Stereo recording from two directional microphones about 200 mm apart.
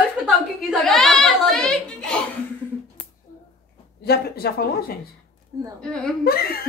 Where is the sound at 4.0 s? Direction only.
50° left (ahead or behind).